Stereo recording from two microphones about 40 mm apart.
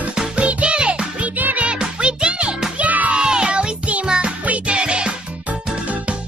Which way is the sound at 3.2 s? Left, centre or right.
Right.